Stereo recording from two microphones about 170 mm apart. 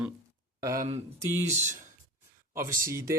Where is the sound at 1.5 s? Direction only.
45° right (ahead or behind).